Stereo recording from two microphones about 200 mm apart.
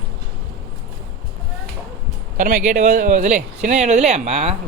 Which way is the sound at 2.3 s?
40° right (ahead or behind).